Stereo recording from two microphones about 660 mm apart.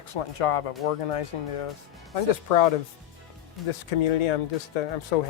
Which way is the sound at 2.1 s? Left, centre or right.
Left.